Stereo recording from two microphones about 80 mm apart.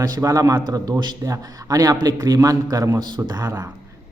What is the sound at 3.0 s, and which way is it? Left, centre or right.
Speech, right.